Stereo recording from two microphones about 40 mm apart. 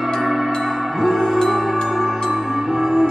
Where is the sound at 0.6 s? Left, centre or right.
Centre.